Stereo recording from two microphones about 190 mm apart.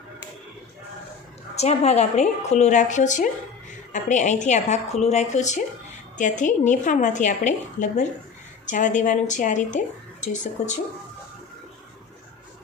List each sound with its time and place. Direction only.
1.5 s speech: 35° left (ahead or behind)